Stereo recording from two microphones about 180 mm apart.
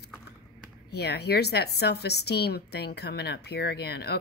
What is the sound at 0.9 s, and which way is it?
A woman's voice, 65° left (ahead or behind).